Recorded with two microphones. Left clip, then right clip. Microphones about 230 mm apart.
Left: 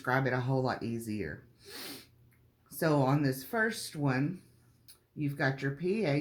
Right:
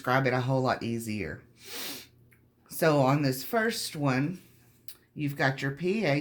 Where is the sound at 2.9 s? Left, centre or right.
Right.